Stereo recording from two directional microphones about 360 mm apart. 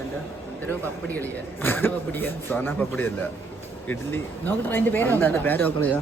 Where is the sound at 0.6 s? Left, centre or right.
Centre.